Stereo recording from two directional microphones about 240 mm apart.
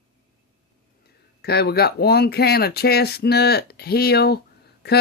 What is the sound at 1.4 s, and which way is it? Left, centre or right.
Speech, left.